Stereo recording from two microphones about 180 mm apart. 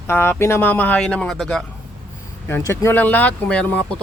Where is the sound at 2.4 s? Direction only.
15° left (ahead or behind).